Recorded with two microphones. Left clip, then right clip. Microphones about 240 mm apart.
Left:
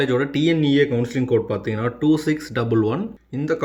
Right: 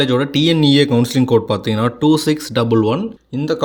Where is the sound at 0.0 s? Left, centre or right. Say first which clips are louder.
Right 4 dB; centre.